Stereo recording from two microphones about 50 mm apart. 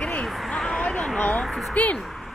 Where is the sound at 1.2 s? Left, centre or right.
Left.